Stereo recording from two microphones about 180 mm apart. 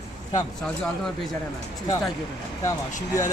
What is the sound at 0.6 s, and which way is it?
Speech, 5° left (ahead or behind).